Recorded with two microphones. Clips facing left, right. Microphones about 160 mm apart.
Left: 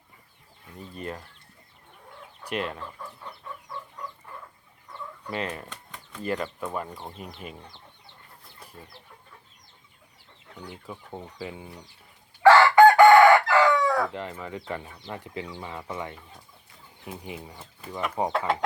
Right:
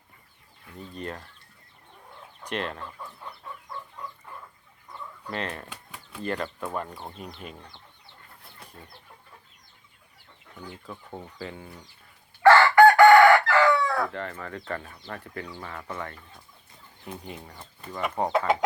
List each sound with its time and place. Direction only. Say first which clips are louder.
0.8 s speech: even; 5° left (ahead or behind)
2.4 s speech: left 1 dB; 5° left (ahead or behind)
5.3 s speech: left 1 dB; 5° left (ahead or behind)
5.6 s a sound: even; 10° right (ahead or behind)
6.2 s speech: left 1 dB; 5° left (ahead or behind)
10.7 s speech: left 1 dB; 10° left (ahead or behind)
12.4 s chicken: left 1 dB; 15° left (ahead or behind)
15.0 s speech: left 2 dB; 15° left (ahead or behind); by 18.5 s centre (ahead or behind)